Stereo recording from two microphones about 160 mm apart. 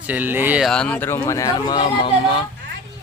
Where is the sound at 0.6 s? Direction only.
5° left (ahead or behind); by 2.4 s 35° left (ahead or behind).